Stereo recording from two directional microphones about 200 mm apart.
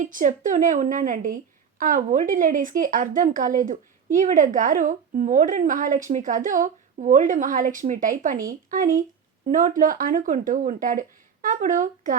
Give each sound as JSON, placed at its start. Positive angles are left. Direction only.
{"t": 0.0, "sound": "speech", "side_deg": -40}